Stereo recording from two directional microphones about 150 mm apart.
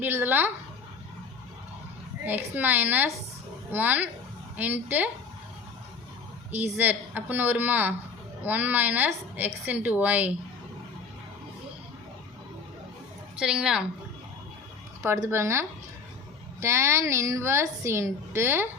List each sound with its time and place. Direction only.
0.0 s a woman's voice: 15° right (ahead or behind)
2.2 s a woman's voice: 10° right (ahead or behind)
6.5 s a woman's voice: 10° right (ahead or behind)
13.3 s a woman's voice: 5° right (ahead or behind)
15.0 s a woman's voice: 20° right (ahead or behind)